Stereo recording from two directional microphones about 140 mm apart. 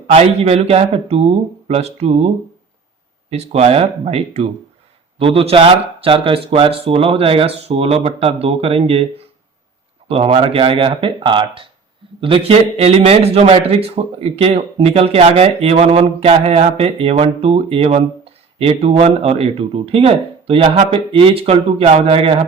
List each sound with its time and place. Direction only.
0.1 s a man's voice: 45° right (ahead or behind)
10.1 s a man's voice: 45° right (ahead or behind)